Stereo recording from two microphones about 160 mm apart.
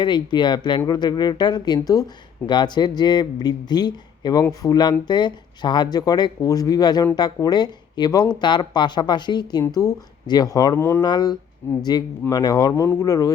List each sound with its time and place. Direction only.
0.0 s speech: 30° left (ahead or behind)
11.0 s speech: 25° left (ahead or behind)